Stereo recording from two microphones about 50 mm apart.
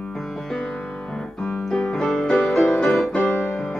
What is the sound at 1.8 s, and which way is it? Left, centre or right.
Music, centre.